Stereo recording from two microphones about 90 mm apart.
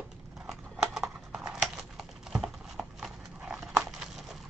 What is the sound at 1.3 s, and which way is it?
Clip-clop, 5° right (ahead or behind).